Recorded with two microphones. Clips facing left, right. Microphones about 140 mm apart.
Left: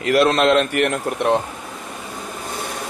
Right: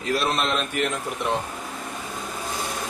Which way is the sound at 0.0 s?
80° left.